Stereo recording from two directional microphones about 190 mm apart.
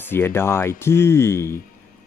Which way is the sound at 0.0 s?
10° left (ahead or behind).